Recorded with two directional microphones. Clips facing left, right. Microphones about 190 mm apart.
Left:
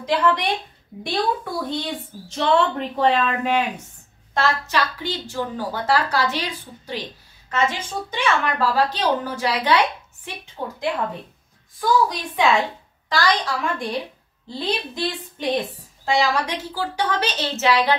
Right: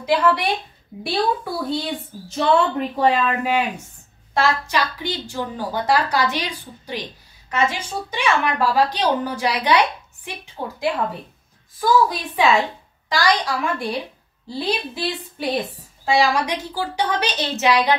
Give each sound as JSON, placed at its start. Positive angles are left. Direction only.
{"t": 0.0, "sound": "a woman's voice", "side_deg": -10}
{"t": 7.5, "sound": "a woman's voice", "side_deg": -15}